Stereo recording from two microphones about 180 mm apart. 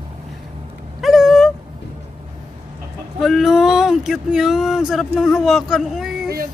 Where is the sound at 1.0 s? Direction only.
Centre (ahead or behind).